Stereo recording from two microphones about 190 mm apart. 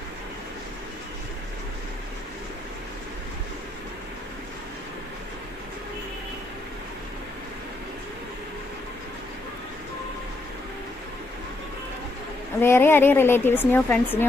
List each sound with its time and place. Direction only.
12.5 s a woman's voice: 10° left (ahead or behind)